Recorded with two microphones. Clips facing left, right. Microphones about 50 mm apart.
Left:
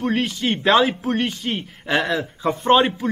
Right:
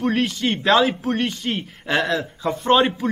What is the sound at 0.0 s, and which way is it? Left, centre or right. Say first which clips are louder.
A man's voice: right 1 dB; centre.